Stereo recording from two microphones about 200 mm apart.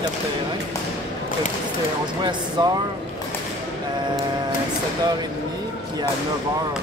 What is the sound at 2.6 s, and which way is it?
Speech, 20° right (ahead or behind).